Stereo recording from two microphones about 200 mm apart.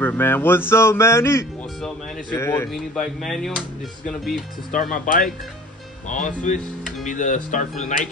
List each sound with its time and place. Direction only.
0.0 s speech: 10° left (ahead or behind)
4.7 s speech: 45° left (ahead or behind)